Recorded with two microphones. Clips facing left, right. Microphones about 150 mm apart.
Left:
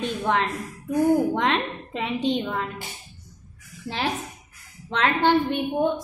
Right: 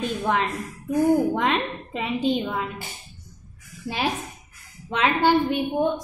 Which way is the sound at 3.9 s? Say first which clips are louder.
Right 1 dB; 10° right (ahead or behind).